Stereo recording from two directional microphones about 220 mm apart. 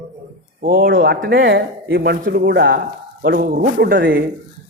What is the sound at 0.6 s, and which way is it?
A man's voice, 40° right (ahead or behind).